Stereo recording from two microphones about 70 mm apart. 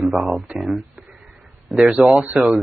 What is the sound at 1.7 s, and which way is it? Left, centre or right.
Speech, centre.